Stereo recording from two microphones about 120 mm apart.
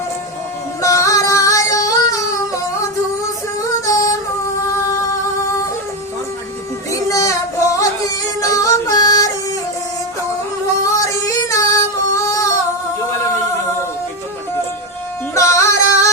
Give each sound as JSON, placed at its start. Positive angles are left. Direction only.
{"t": 0.8, "sound": "music", "side_deg": 25}
{"t": 3.6, "sound": "music", "side_deg": 30}
{"t": 6.9, "sound": "music", "side_deg": 25}
{"t": 10.8, "sound": "singing", "side_deg": 25}
{"t": 15.4, "sound": "music", "side_deg": 25}